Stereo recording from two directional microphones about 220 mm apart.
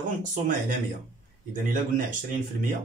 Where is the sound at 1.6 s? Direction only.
35° right (ahead or behind).